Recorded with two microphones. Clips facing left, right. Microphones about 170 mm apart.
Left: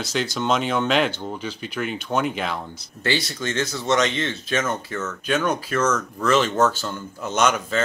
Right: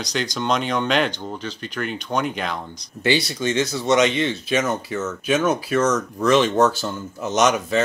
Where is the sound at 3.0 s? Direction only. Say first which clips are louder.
Right 4 dB; 15° right (ahead or behind).